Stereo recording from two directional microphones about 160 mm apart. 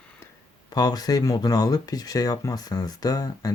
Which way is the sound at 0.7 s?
25° left (ahead or behind).